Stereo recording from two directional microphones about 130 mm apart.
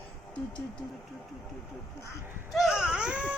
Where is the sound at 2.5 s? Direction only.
5° right (ahead or behind).